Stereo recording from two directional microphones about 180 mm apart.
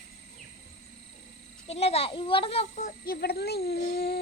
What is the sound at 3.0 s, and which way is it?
Speech, 60° left (ahead or behind).